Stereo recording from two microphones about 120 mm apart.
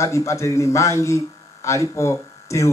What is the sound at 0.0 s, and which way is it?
A man's voice, 25° left (ahead or behind).